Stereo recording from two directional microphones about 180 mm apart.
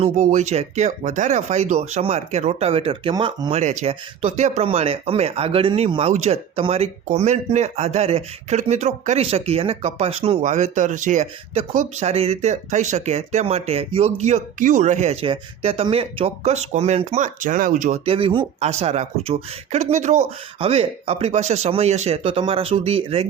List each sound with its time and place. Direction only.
0.0 s speech: 40° right (ahead or behind)
3.6 s speech: 40° right (ahead or behind)